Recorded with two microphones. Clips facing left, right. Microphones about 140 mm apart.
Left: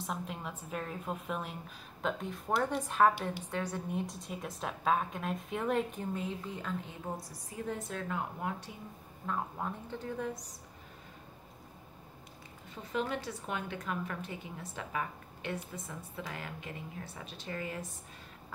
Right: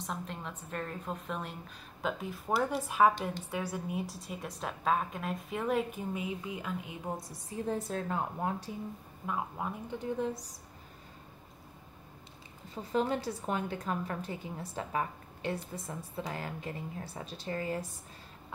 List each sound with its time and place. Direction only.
0.0 s a woman's voice: 5° left (ahead or behind); by 7.2 s 10° right (ahead or behind)
7.6 s a woman's voice: 35° right (ahead or behind)
9.2 s a woman's voice: 10° right (ahead or behind); by 10.5 s 30° right (ahead or behind)
12.9 s a woman's voice: 35° right (ahead or behind)